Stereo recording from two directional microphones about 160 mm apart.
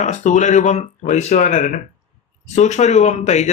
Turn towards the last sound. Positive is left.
turn(degrees=45)  # may be behind; listen again after turning